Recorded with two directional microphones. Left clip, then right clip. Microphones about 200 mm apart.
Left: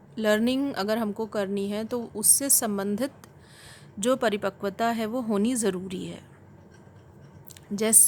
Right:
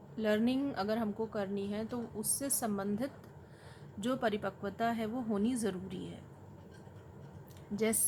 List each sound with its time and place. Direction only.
0.2 s a woman's voice: 50° left (ahead or behind)